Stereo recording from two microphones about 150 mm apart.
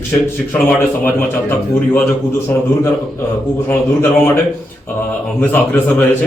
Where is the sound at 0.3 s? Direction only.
15° left (ahead or behind).